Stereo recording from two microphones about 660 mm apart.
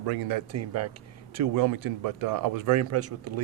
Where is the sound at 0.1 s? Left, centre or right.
Right.